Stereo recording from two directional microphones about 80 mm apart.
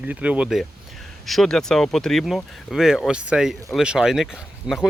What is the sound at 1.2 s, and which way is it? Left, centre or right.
Speech, centre.